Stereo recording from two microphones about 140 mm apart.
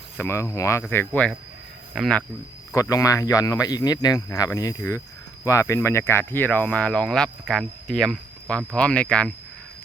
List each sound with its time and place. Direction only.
0.2 s speech: 20° left (ahead or behind)
2.7 s speech: 25° left (ahead or behind); by 9.3 s 5° left (ahead or behind)